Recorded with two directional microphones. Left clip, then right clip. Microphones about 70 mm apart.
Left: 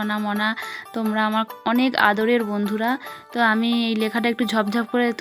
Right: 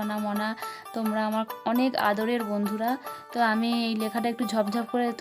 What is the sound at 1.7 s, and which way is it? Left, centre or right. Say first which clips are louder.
Speech: left 7 dB; left.